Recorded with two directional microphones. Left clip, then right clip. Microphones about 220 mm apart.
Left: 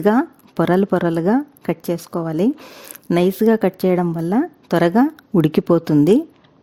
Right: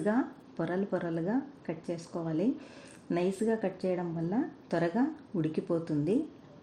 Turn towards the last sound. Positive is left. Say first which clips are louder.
# left 16 dB
turn(degrees=55)  # may be behind; listen again after turning